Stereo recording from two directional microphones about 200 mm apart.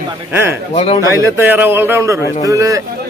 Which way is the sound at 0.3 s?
10° right (ahead or behind).